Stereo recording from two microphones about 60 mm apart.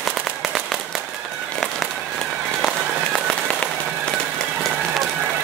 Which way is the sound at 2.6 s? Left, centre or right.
Centre.